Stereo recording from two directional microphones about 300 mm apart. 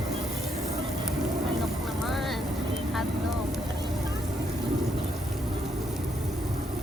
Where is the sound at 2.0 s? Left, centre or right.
Centre.